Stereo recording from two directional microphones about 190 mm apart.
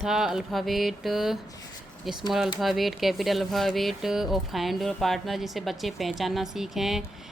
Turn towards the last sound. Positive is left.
turn(degrees=0)  # may be behind; listen again after turning